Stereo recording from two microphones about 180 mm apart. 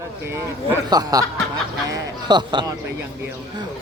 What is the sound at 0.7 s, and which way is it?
Speech, 20° right (ahead or behind).